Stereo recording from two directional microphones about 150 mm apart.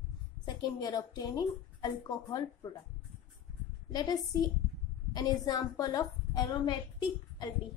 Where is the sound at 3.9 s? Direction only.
25° left (ahead or behind).